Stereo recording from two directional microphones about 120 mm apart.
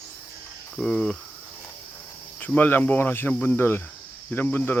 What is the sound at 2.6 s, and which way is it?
Speech, 15° left (ahead or behind).